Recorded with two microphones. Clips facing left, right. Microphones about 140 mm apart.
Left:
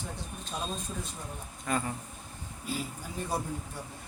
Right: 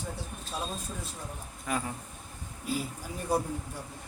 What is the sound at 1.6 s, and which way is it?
Speech, centre (ahead or behind).